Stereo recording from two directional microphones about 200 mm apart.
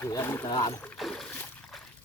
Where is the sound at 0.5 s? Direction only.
15° left (ahead or behind).